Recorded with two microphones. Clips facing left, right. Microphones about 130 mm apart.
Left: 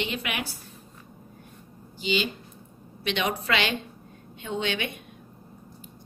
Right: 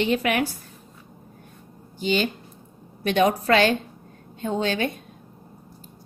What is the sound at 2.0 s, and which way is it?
A woman's voice, 50° right (ahead or behind).